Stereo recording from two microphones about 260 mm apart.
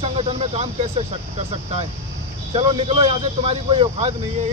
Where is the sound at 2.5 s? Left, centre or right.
Right.